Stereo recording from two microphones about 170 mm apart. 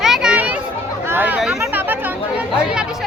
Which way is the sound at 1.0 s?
10° right (ahead or behind).